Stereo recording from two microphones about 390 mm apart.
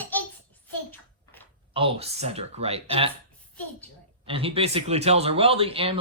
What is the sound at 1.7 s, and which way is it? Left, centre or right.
Speech, centre.